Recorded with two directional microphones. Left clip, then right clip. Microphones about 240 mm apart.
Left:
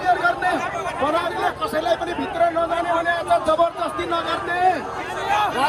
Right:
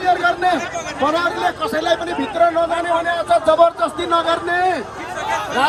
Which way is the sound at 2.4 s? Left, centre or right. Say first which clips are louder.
Right 4 dB; right.